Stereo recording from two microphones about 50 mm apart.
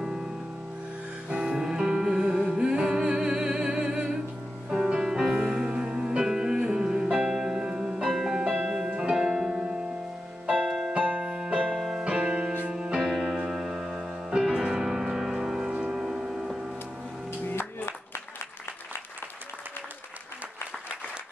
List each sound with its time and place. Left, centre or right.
0.0 s music: centre
1.4 s music: centre
10.5 s music: centre
10.9 s keyboard: right
11.3 s music: centre
17.5 s music: left